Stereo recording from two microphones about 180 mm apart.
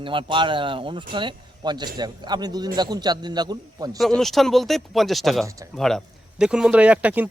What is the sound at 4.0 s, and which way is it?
Speech, centre (ahead or behind).